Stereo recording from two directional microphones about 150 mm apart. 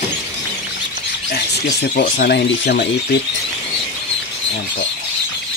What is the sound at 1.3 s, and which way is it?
Speech, 90° left.